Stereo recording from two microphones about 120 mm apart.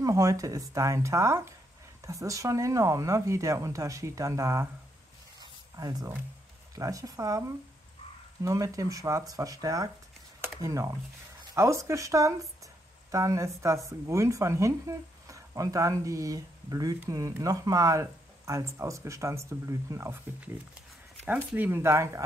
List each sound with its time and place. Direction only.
0.0 s speech: 25° right (ahead or behind)
5.4 s a sound: 35° right (ahead or behind)
6.7 s speech: 30° right (ahead or behind)
21.5 s speech: 20° right (ahead or behind)